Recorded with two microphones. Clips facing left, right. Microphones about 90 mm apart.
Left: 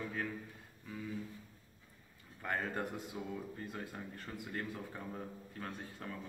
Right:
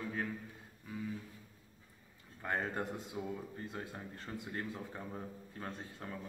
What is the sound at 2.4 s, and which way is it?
A man's voice, 25° right (ahead or behind).